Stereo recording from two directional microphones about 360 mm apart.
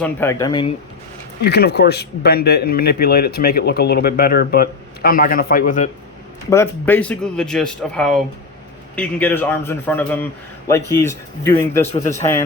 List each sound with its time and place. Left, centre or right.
0.0 s speech: centre
1.5 s speech: left
6.5 s speech: centre